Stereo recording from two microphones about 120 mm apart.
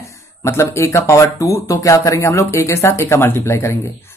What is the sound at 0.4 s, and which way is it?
Speech, 20° left (ahead or behind).